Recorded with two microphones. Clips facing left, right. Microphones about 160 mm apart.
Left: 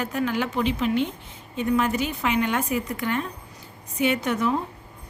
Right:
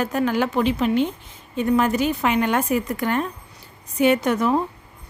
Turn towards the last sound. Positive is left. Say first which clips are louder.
# right 5 dB
turn(degrees=-45)  # may be behind; listen again after turning